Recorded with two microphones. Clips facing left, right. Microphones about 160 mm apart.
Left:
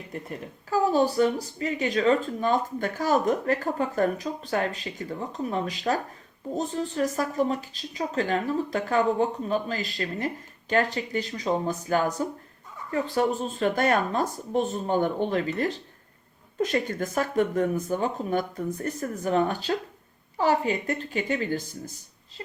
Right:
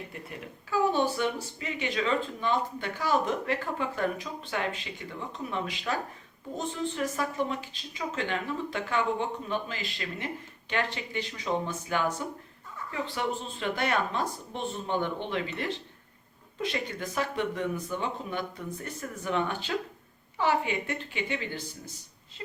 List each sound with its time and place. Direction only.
0.1 s speech: 40° left (ahead or behind)